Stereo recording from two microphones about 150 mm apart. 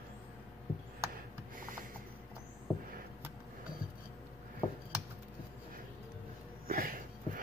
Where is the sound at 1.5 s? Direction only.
70° right (ahead or behind).